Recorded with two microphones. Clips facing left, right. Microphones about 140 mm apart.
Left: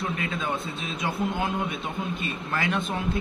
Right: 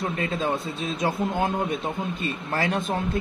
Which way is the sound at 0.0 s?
35° right (ahead or behind).